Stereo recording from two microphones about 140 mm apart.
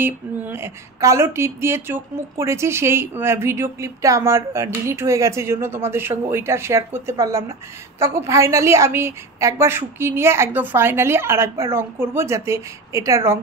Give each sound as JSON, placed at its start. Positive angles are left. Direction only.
{"t": 0.0, "sound": "speech", "side_deg": -15}